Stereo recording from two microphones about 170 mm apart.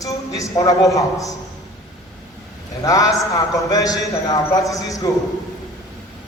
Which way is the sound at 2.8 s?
20° left (ahead or behind).